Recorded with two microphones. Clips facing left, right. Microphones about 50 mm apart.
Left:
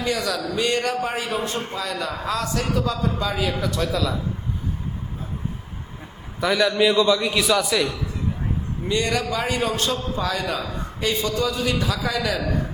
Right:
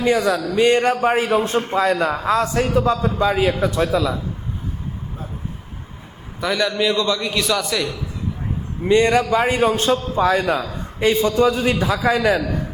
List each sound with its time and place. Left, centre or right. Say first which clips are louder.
0.0 s a man's voice: right 7 dB; right
3.9 s a man's voice: right 5 dB; centre
6.4 s a man's voice: left 1 dB; centre
8.8 s a man's voice: right 9 dB; right